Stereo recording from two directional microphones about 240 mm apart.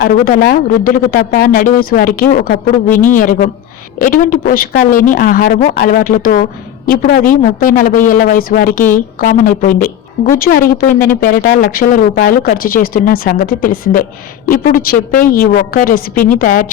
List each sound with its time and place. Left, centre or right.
0.0 s a woman's voice: left